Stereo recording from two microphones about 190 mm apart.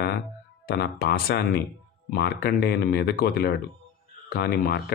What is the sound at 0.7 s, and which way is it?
Speech, 55° left (ahead or behind).